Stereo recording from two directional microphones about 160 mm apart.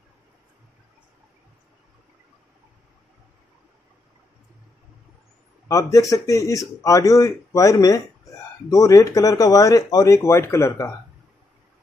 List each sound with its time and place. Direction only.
5.7 s a man's voice: 20° left (ahead or behind)